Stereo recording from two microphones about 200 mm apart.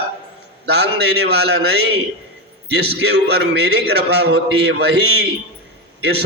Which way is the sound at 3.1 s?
55° right (ahead or behind).